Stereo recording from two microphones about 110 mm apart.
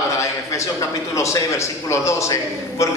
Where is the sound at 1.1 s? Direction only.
25° left (ahead or behind).